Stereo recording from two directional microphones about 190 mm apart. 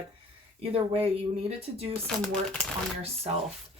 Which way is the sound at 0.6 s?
30° right (ahead or behind).